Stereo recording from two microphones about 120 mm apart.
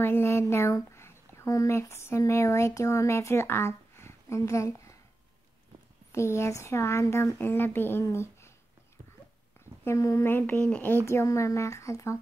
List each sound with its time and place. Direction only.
0.0 s speech: 20° left (ahead or behind)
6.1 s speech: 20° left (ahead or behind)
9.8 s speech: 25° left (ahead or behind)